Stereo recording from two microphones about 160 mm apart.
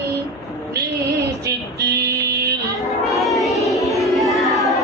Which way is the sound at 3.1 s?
Centre (ahead or behind).